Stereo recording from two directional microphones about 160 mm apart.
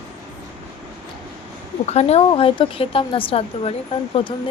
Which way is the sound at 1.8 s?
40° left (ahead or behind).